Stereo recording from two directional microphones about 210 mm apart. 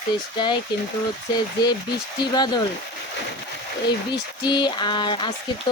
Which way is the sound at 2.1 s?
20° left (ahead or behind).